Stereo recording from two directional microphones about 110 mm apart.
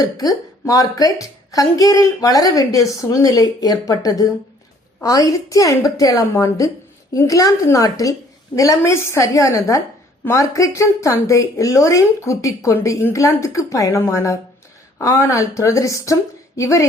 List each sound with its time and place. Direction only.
0.0 s a woman's voice: 35° left (ahead or behind)